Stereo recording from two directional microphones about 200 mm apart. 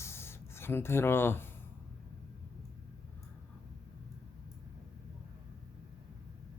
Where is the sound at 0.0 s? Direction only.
10° left (ahead or behind).